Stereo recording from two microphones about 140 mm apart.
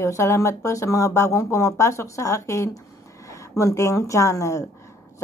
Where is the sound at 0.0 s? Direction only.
20° left (ahead or behind).